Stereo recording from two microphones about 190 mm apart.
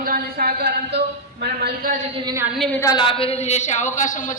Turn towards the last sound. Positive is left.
turn(degrees=45)  # may be behind; listen again after turning